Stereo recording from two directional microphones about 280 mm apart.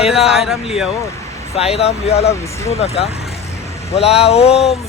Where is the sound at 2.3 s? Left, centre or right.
Centre.